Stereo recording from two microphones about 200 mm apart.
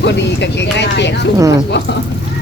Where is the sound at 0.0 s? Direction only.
60° left (ahead or behind).